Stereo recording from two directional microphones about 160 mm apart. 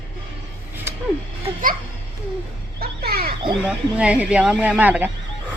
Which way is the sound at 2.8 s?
70° right (ahead or behind).